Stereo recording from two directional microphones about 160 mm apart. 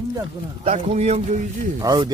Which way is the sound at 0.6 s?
40° right (ahead or behind).